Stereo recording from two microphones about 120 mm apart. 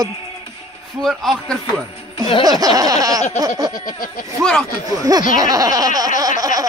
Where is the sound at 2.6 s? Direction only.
30° right (ahead or behind).